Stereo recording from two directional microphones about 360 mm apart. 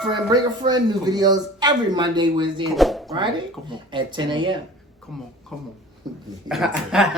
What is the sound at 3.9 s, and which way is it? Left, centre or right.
Speech, centre.